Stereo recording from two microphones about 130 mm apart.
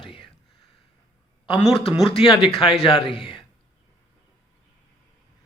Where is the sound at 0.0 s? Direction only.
45° left (ahead or behind).